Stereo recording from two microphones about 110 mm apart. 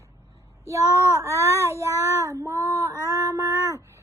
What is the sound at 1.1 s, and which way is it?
A child's voice, 25° right (ahead or behind).